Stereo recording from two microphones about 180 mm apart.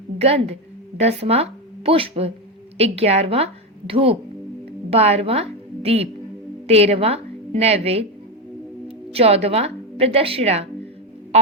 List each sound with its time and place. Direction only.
0.2 s a woman's voice: 35° right (ahead or behind)
9.1 s a woman's voice: 35° right (ahead or behind)